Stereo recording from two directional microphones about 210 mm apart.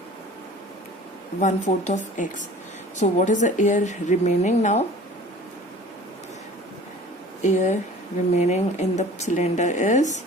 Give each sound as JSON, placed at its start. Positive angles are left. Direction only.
{"t": 1.4, "sound": "a woman's voice", "side_deg": 35}
{"t": 7.4, "sound": "a woman's voice", "side_deg": 35}